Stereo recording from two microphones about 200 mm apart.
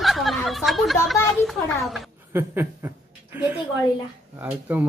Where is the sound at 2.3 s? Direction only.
10° right (ahead or behind).